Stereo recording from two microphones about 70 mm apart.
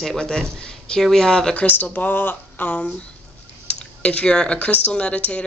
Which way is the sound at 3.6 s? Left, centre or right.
Centre.